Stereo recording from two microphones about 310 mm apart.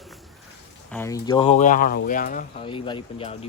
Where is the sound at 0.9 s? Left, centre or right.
Centre.